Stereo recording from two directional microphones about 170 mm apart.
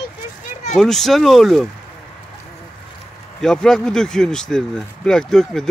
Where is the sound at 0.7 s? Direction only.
Centre (ahead or behind).